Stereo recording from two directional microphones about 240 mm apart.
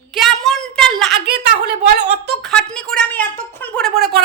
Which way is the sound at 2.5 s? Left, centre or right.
Centre.